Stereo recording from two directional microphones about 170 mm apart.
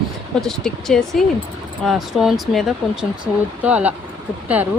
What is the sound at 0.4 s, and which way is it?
Speech, centre (ahead or behind).